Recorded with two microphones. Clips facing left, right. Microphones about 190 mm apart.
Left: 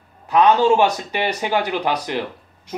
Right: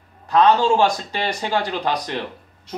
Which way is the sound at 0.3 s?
15° left (ahead or behind).